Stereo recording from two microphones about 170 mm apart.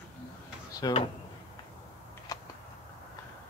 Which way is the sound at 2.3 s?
20° left (ahead or behind).